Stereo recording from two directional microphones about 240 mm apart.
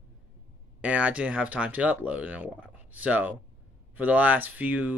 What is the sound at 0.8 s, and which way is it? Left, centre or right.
A man's voice, centre.